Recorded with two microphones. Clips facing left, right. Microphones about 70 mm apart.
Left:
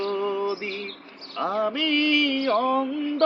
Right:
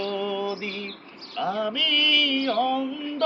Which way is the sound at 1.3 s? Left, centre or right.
Left.